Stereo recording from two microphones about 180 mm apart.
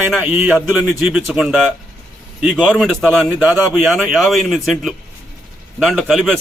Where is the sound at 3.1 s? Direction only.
10° right (ahead or behind).